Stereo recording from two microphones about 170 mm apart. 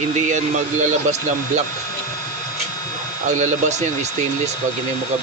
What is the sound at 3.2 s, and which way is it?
Speech, 45° right (ahead or behind).